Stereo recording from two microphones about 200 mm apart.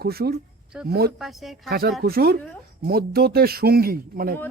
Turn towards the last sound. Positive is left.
turn(degrees=-45)  # may be behind; listen again after turning